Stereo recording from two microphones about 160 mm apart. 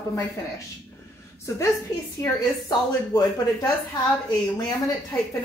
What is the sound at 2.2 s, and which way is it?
Speech, 20° left (ahead or behind).